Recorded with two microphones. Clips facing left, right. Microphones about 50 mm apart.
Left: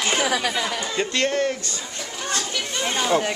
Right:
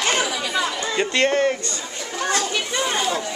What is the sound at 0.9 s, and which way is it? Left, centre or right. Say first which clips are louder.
Speech: right 4 dB; centre.